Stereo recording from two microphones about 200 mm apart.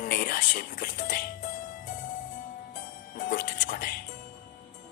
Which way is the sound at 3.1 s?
45° left (ahead or behind).